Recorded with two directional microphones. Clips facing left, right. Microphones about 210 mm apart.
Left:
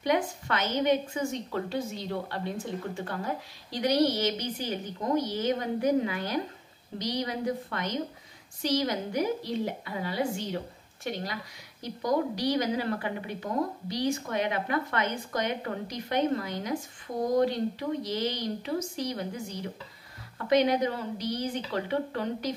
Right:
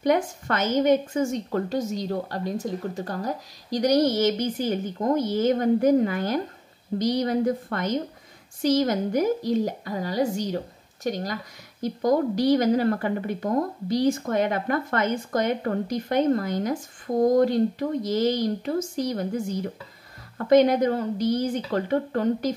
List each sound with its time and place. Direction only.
0.0 s a woman's voice: 45° right (ahead or behind)